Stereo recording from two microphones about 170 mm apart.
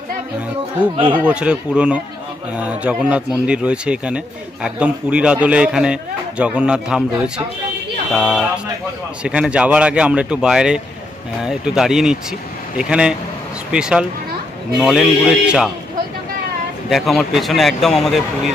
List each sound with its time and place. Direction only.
0.9 s speech: 30° right (ahead or behind)
1.2 s speech: 5° right (ahead or behind)
16.9 s speech: centre (ahead or behind)